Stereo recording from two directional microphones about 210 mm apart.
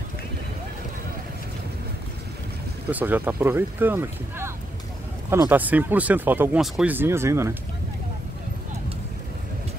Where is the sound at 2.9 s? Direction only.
10° right (ahead or behind).